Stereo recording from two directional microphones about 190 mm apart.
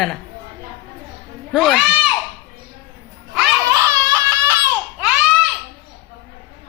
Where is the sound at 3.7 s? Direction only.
15° right (ahead or behind).